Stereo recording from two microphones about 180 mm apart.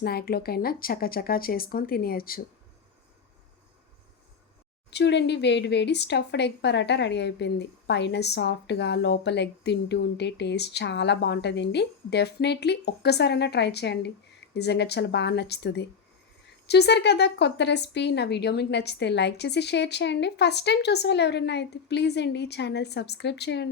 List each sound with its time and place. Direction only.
0.0 s speech: 60° left (ahead or behind)
4.9 s speech: 70° left (ahead or behind)